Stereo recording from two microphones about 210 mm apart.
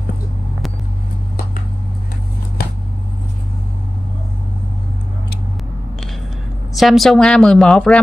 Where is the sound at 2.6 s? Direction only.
45° left (ahead or behind).